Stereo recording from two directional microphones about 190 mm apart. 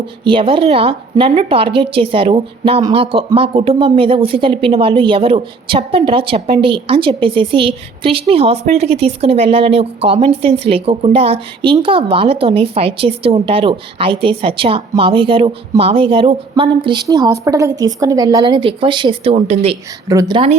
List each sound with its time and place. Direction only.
0.3 s speech: 25° right (ahead or behind)
20.1 s speech: 20° right (ahead or behind)